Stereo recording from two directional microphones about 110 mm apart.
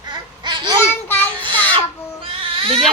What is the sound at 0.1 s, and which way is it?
Babbling, 45° right (ahead or behind).